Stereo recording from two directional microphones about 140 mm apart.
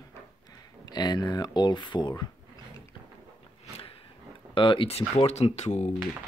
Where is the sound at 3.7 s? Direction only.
40° left (ahead or behind).